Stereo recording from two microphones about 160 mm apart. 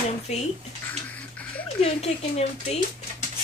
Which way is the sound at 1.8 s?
40° left (ahead or behind).